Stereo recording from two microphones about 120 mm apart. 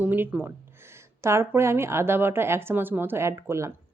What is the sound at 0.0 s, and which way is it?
A woman's voice, 15° right (ahead or behind).